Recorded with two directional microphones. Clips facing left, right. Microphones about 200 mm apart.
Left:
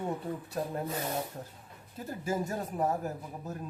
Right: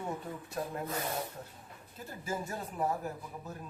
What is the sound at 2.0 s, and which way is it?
Speech, 45° left (ahead or behind).